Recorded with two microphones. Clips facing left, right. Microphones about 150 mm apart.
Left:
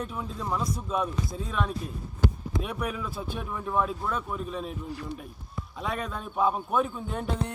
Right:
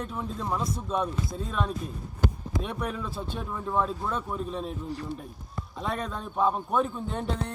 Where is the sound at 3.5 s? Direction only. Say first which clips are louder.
Even; 15° right (ahead or behind).